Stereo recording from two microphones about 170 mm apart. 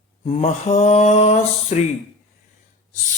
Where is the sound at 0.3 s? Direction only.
35° left (ahead or behind).